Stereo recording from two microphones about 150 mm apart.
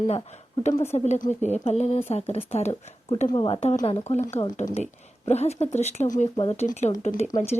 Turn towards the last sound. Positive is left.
turn(degrees=45)  # may be behind; listen again after turning